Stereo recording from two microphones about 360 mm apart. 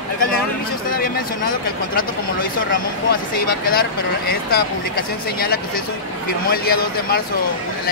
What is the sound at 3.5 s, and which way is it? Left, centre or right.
Speech, left.